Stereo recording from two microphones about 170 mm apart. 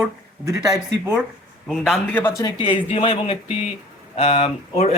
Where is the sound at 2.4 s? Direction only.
25° left (ahead or behind).